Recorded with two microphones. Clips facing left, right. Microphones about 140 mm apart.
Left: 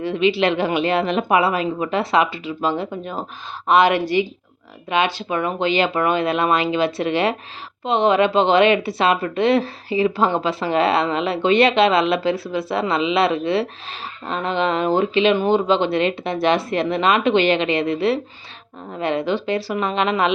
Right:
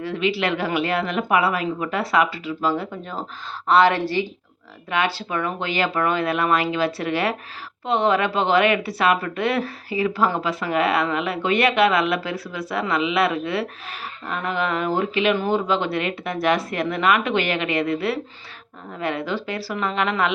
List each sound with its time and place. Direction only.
0.0 s a woman's voice: 20° left (ahead or behind)